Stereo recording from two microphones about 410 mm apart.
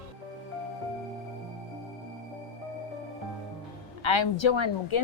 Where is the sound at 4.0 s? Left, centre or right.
Left.